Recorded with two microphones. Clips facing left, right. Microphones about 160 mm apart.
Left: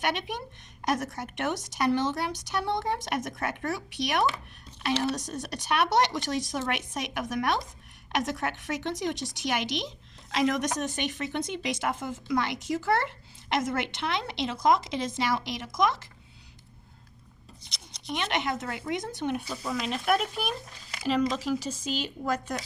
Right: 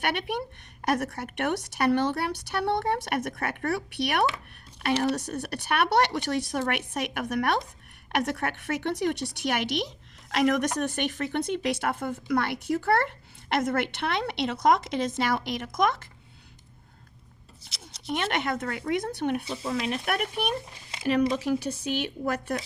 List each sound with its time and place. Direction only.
0.0 s a woman's voice: 60° right (ahead or behind)
17.6 s a sound: 5° right (ahead or behind)
18.1 s a woman's voice: 55° right (ahead or behind)
19.5 s speech: 25° right (ahead or behind)
19.8 s a woman's voice: 65° right (ahead or behind)
20.9 s a sound: 25° right (ahead or behind)
21.7 s a woman's voice: 65° right (ahead or behind)